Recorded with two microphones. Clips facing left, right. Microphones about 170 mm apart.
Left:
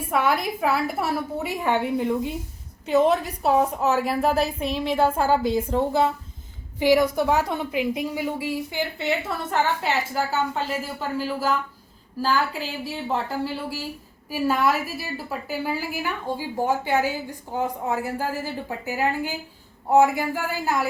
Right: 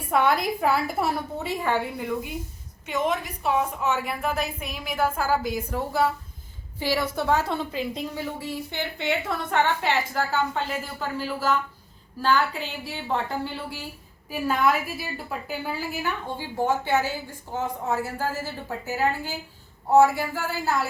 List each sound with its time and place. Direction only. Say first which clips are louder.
0.1 s speech: right 1 dB; 5° left (ahead or behind)
1.4 s a woman's voice: left 3 dB; 15° left (ahead or behind)
2.8 s a woman's voice: left 7 dB; 35° left (ahead or behind); by 20.8 s 15° left (ahead or behind)